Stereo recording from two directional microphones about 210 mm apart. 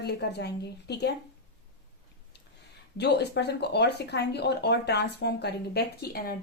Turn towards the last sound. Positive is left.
turn(degrees=50)  # may be behind; listen again after turning